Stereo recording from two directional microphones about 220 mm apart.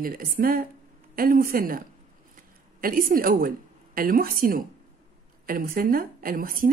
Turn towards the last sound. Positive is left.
turn(degrees=-40)  # may be behind; listen again after turning